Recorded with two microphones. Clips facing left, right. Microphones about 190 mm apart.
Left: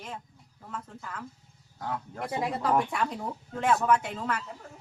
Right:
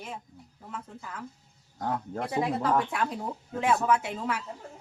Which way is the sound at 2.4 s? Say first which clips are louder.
Left 1 dB; centre (ahead or behind).